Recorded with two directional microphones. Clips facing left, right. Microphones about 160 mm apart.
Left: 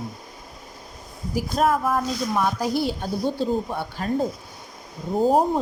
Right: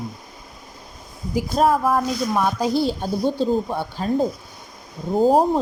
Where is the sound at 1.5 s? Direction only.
35° right (ahead or behind).